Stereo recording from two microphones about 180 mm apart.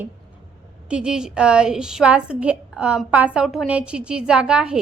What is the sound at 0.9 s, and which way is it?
A woman's voice, 5° right (ahead or behind).